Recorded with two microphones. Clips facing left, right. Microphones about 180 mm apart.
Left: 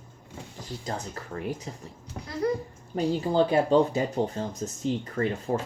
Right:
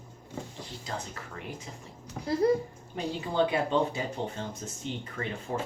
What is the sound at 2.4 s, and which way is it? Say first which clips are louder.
Speech: right 2 dB; 30° right (ahead or behind).